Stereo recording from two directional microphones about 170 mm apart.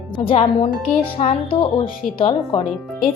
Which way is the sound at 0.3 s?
35° left (ahead or behind).